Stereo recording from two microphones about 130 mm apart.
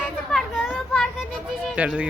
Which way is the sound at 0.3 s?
Centre (ahead or behind).